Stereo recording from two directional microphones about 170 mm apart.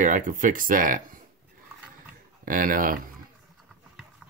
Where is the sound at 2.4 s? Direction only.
55° right (ahead or behind).